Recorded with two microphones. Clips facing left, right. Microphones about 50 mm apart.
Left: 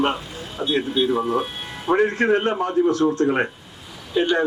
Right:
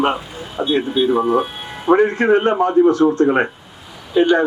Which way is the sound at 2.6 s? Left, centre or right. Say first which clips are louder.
Right 7 dB; centre.